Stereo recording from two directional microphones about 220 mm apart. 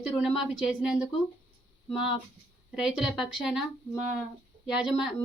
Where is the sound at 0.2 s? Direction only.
Centre (ahead or behind).